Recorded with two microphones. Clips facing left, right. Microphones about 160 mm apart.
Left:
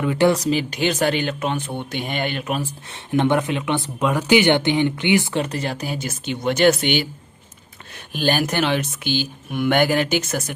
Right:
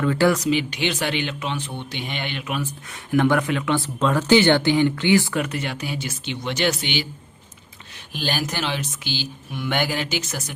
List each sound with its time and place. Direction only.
0.0 s speech: 20° left (ahead or behind)
0.3 s speech: 35° left (ahead or behind)
2.9 s speech: 25° left (ahead or behind); by 10.5 s 55° left (ahead or behind)